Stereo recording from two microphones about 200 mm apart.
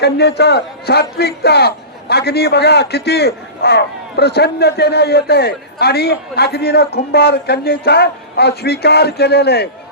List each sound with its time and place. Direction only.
0.0 s a man's voice: 55° left (ahead or behind)